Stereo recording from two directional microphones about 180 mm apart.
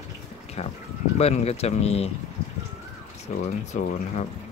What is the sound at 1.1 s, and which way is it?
Speech, 35° left (ahead or behind).